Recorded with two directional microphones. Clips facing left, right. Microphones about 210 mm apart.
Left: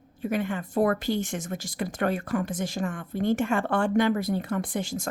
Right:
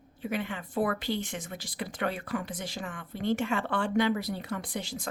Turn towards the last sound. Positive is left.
turn(degrees=50)  # may be behind; listen again after turning